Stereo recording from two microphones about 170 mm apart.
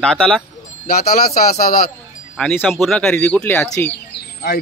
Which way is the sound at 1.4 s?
55° left (ahead or behind).